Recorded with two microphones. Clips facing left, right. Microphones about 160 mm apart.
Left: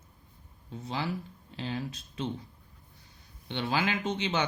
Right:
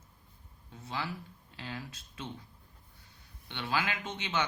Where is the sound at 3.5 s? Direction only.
25° left (ahead or behind).